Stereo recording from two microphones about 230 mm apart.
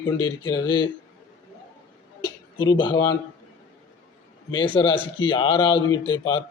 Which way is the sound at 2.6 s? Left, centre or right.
Centre.